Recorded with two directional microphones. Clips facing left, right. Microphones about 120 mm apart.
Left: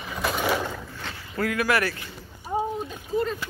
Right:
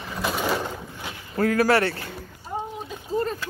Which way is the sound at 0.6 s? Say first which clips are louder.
Even; 15° right (ahead or behind).